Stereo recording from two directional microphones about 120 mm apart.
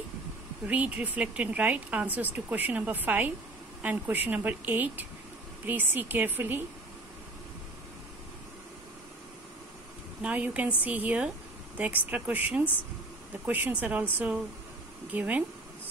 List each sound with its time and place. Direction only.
0.7 s speech: 10° right (ahead or behind)
10.2 s speech: 10° right (ahead or behind)